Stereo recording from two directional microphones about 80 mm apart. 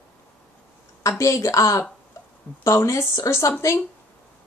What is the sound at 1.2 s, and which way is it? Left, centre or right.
Speech, left.